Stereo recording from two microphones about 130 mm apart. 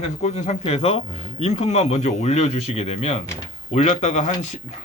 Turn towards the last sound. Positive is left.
turn(degrees=65)  # may be behind; listen again after turning